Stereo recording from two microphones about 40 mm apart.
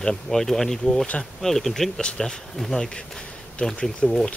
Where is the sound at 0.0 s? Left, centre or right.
Centre.